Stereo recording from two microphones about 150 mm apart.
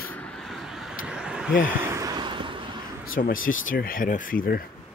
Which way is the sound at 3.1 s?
65° left (ahead or behind).